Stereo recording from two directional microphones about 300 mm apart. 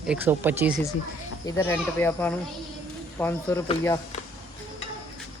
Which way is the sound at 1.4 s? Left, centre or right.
Centre.